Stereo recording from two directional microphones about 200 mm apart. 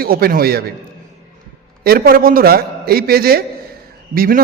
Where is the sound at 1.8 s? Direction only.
50° right (ahead or behind).